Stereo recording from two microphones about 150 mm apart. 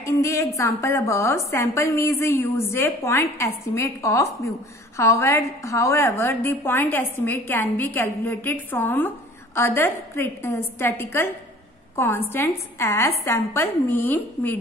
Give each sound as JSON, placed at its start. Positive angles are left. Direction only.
{"t": 0.0, "sound": "a woman's voice", "side_deg": 20}
{"t": 12.3, "sound": "a woman's voice", "side_deg": 15}